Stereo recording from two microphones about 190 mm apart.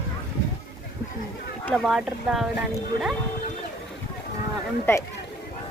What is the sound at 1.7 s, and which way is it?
Speech, centre (ahead or behind).